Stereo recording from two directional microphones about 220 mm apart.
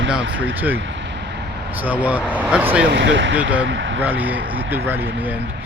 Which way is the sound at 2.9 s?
55° right (ahead or behind).